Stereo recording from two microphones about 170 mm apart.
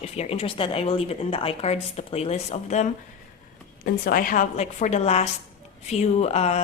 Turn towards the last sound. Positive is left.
turn(degrees=40)  # may be behind; listen again after turning